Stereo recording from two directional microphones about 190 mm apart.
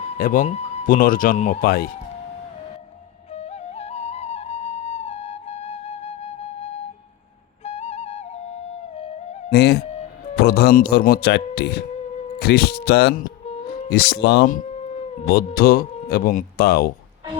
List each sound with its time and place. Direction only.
0.2 s speech: 50° left (ahead or behind)
3.3 s flute: 35° left (ahead or behind)
7.6 s music: 35° left (ahead or behind)
9.5 s speech: 60° left (ahead or behind)
15.3 s speech: 50° left (ahead or behind)